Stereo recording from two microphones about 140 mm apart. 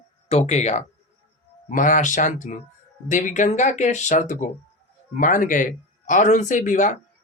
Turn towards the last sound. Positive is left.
turn(degrees=65)  # may be behind; listen again after turning